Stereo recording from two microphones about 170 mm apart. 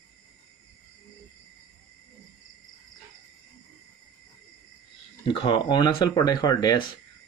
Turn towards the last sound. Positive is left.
turn(degrees=20)  # may be behind; listen again after turning